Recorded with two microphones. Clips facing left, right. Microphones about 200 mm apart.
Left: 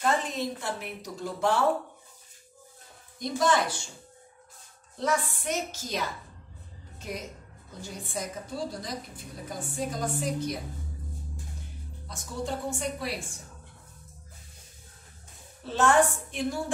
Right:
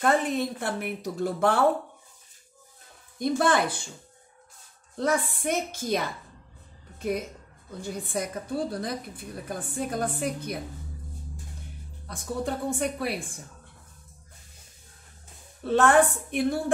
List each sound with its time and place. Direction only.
0.0 s a woman's voice: 60° right (ahead or behind)
3.2 s a woman's voice: 55° right (ahead or behind)
4.9 s a woman's voice: 55° right (ahead or behind)
12.1 s a woman's voice: 55° right (ahead or behind)
15.6 s a woman's voice: 60° right (ahead or behind)